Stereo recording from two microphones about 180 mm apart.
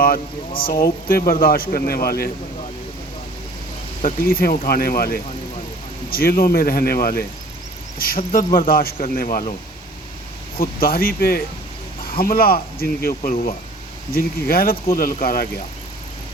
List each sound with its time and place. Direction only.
0.0 s speech: 55° left (ahead or behind)
4.0 s speech: 55° left (ahead or behind)
10.6 s speech: 55° left (ahead or behind)